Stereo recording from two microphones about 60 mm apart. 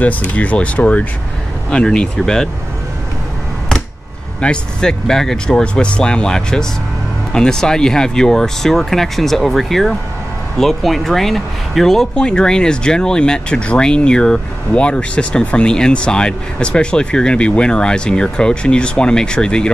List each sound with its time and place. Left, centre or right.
0.3 s speech: left
1.7 s speech: centre
4.4 s speech: centre